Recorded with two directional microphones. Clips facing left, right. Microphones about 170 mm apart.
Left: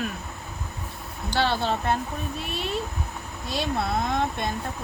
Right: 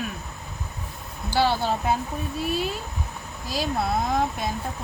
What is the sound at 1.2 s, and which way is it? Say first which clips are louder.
Speech: right 2 dB; 10° right (ahead or behind).